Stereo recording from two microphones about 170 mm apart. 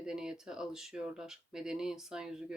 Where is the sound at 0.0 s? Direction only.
5° right (ahead or behind).